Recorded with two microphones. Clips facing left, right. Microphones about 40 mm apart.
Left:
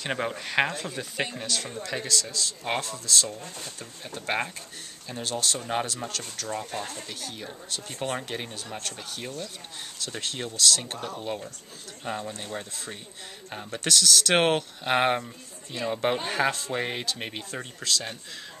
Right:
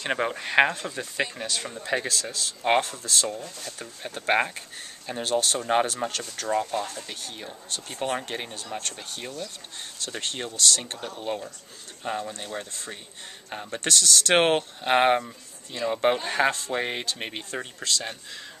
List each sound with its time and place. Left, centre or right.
0.0 s speech: centre
1.8 s speech: right
7.2 s speech: centre